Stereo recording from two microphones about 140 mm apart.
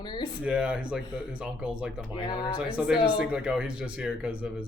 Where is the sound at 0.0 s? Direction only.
30° left (ahead or behind).